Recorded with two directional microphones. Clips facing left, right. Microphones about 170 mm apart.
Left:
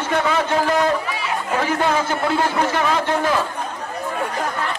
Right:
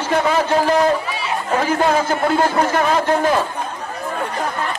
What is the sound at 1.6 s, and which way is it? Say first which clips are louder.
A man's voice: right 3 dB; 40° right (ahead or behind).